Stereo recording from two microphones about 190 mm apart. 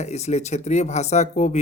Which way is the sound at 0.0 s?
35° left (ahead or behind).